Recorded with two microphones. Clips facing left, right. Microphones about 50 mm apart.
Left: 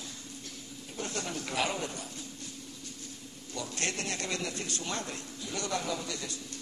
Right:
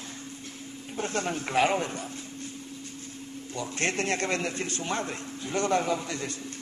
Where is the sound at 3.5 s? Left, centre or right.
Right.